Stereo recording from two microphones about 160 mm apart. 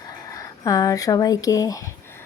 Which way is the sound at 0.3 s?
20° left (ahead or behind).